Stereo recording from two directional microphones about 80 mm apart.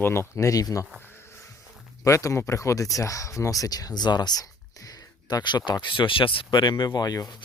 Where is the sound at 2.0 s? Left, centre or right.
Left.